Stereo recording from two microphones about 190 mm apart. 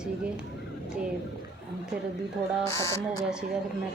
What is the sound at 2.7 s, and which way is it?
Speech, 15° left (ahead or behind).